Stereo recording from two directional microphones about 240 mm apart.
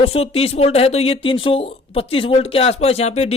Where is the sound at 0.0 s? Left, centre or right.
Left.